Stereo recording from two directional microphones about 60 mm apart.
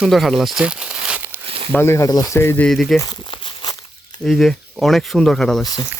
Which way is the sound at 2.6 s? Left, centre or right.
Centre.